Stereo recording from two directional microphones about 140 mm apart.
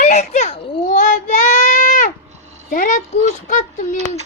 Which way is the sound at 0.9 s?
65° left (ahead or behind).